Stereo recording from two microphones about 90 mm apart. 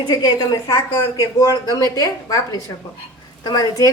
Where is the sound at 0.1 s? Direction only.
50° left (ahead or behind).